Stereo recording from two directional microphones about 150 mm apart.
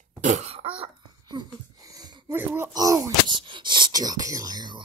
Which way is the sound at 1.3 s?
30° right (ahead or behind).